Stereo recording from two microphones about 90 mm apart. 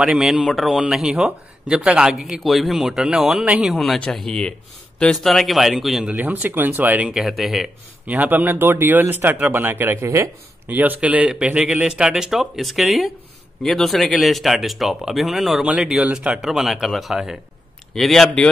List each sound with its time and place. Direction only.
0.0 s speech: 5° right (ahead or behind)
3.7 s speech: centre (ahead or behind)
6.0 s speech: 15° right (ahead or behind)
7.1 s speech: centre (ahead or behind)
8.1 s speech: 15° right (ahead or behind)
10.7 s speech: 20° right (ahead or behind); by 18.5 s 5° left (ahead or behind)